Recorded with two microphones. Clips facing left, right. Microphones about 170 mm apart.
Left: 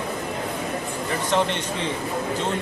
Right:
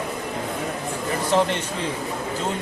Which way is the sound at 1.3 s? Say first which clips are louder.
Right 2 dB; 5° right (ahead or behind).